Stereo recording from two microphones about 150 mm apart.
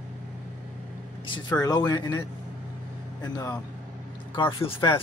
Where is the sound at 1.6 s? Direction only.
25° left (ahead or behind).